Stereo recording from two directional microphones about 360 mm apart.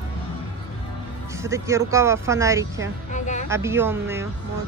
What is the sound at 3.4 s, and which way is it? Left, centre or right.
Speech, centre.